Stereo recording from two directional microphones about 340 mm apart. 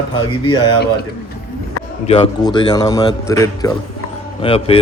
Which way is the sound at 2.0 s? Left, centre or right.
Centre.